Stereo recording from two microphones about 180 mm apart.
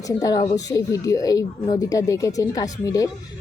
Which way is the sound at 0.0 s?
20° left (ahead or behind).